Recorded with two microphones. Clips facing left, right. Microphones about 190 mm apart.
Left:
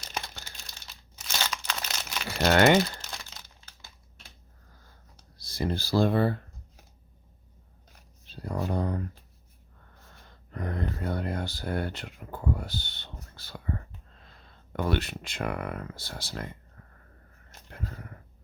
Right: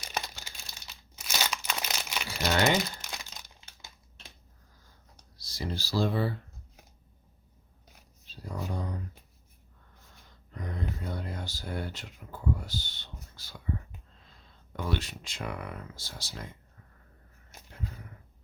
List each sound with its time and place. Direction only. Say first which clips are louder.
0.9 s crumpling: even; 10° right (ahead or behind)
2.4 s speech: left 6 dB; 60° left (ahead or behind)
3.0 s crumpling: even; 15° right (ahead or behind)
5.4 s speech: left 6 dB; 55° left (ahead or behind)
8.3 s a sound: left 6 dB; 60° left (ahead or behind)
10.5 s speech: left 4 dB; 60° left (ahead or behind)
17.7 s a sound: left 2 dB; 60° left (ahead or behind)